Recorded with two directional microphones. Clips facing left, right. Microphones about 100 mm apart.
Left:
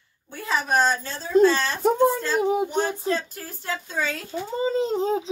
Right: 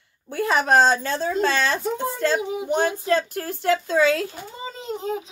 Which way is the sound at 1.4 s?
90° right.